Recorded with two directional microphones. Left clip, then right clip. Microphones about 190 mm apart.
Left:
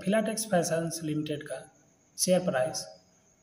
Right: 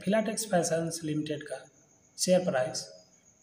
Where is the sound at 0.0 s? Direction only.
5° left (ahead or behind).